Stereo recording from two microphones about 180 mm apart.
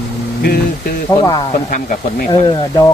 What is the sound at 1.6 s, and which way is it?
Speech, 45° left (ahead or behind).